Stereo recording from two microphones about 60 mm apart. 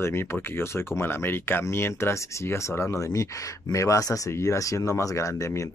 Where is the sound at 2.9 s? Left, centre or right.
Left.